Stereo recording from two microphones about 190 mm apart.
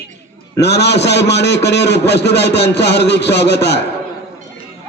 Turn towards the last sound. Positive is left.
turn(degrees=60)  # may be behind; listen again after turning